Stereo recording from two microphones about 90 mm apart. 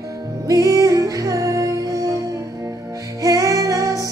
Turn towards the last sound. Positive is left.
turn(degrees=-40)  # may be behind; listen again after turning